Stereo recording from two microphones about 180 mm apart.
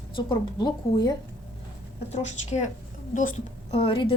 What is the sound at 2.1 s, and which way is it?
Speech, 40° left (ahead or behind).